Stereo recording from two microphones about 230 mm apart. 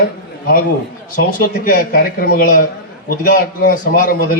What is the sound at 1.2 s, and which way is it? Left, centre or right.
Speech, left.